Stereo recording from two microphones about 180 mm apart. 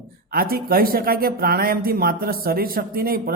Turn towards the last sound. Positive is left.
turn(degrees=-55)  # may be behind; listen again after turning